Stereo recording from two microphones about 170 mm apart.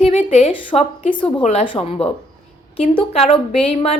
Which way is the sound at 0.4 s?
35° left (ahead or behind).